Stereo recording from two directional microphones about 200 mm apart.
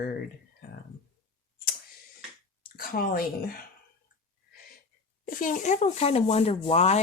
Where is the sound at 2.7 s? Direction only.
45° left (ahead or behind).